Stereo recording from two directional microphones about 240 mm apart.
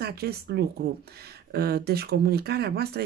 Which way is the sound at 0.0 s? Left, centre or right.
Right.